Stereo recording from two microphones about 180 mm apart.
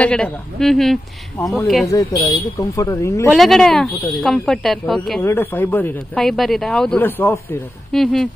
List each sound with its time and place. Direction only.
0.0 s speech: 5° left (ahead or behind)
1.9 s speech: 20° left (ahead or behind)
3.3 s speech: centre (ahead or behind)
5.2 s speech: 10° left (ahead or behind)